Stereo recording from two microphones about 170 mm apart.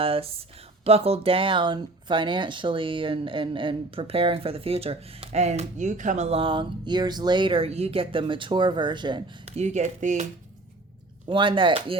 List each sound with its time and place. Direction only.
0.0 s speech: 35° right (ahead or behind)
9.5 s speech: 40° right (ahead or behind)
11.3 s speech: 30° right (ahead or behind)